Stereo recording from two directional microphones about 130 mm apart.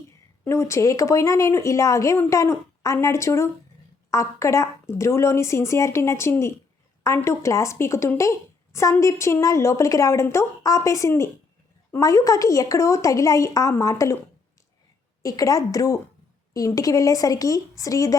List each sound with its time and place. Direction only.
0.4 s a woman's voice: 20° left (ahead or behind)
15.2 s a woman's voice: 25° left (ahead or behind)